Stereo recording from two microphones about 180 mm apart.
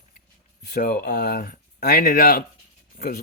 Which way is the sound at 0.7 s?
50° left (ahead or behind).